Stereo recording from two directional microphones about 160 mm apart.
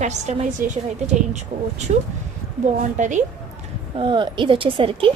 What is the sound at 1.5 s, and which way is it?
Speech, 40° right (ahead or behind).